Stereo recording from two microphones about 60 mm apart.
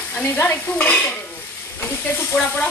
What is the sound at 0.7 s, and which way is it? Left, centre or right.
Speech, left.